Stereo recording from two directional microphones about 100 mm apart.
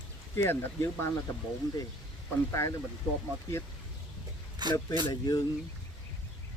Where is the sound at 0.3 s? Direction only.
25° left (ahead or behind).